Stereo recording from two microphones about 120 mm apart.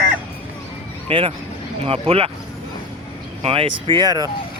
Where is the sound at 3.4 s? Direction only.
50° right (ahead or behind).